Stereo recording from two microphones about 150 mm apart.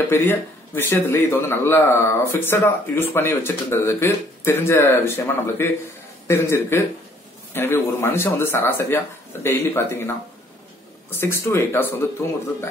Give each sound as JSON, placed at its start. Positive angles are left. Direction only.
{"t": 0.1, "sound": "a man's voice", "side_deg": 15}